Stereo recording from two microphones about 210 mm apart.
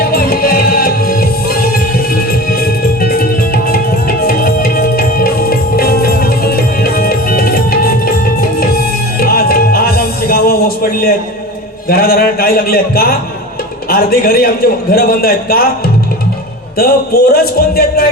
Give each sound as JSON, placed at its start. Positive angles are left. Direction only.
{"t": 0.0, "sound": "music", "side_deg": 45}
{"t": 11.9, "sound": "a sound", "side_deg": 45}
{"t": 13.9, "sound": "a man's voice", "side_deg": 45}
{"t": 16.7, "sound": "a man's voice", "side_deg": 45}